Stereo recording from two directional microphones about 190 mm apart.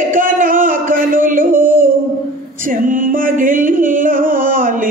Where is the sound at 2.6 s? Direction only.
45° right (ahead or behind).